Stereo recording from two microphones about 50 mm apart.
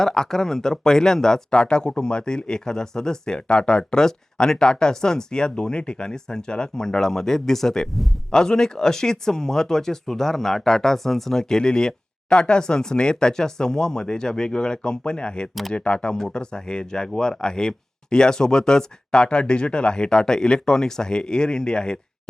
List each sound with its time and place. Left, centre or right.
0.0 s speech: centre